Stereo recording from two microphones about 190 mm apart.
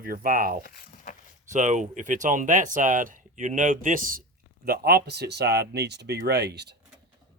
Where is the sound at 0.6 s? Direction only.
45° left (ahead or behind).